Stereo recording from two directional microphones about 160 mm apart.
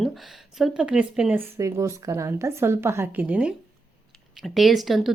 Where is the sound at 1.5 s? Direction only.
20° right (ahead or behind); by 5.1 s centre (ahead or behind).